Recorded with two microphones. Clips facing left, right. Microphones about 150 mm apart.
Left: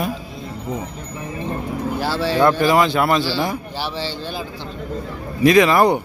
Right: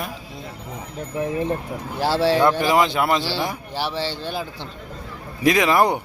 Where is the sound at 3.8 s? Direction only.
60° right (ahead or behind).